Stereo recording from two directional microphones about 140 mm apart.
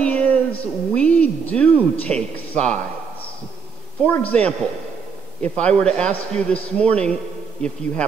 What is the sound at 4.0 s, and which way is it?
A woman's voice, 10° left (ahead or behind).